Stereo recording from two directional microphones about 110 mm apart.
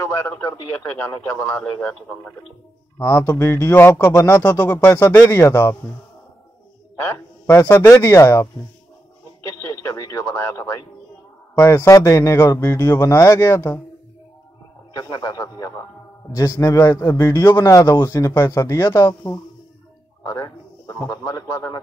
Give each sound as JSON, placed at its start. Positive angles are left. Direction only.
{"t": 0.0, "sound": "a man's voice", "side_deg": 25}
{"t": 1.3, "sound": "a man's voice", "side_deg": 15}
{"t": 3.0, "sound": "a man's voice", "side_deg": 25}
{"t": 7.0, "sound": "a man's voice", "side_deg": 25}
{"t": 9.4, "sound": "radio", "side_deg": 25}
{"t": 11.5, "sound": "a man's voice", "side_deg": 25}
{"t": 15.0, "sound": "a man's voice", "side_deg": 40}